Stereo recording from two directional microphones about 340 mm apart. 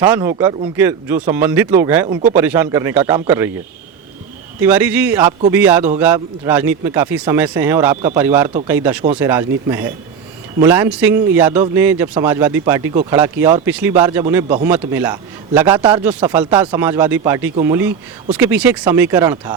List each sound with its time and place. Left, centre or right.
0.0 s a man's voice: centre
4.6 s a man's voice: centre